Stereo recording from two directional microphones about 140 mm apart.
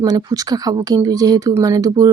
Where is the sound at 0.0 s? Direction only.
25° right (ahead or behind).